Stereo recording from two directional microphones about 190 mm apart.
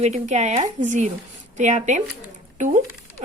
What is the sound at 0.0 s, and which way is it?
A woman's voice, 40° right (ahead or behind).